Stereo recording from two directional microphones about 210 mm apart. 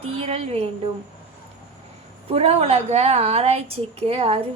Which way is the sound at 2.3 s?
30° right (ahead or behind).